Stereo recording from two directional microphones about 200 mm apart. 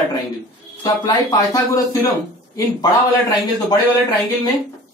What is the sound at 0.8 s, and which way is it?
A man's voice, 20° left (ahead or behind).